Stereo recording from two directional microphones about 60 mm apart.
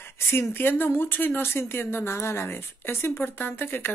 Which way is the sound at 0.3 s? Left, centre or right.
Left.